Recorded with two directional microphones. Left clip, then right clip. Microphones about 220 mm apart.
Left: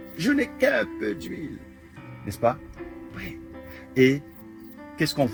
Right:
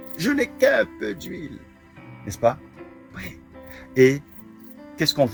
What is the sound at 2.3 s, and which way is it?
Speech, 40° right (ahead or behind).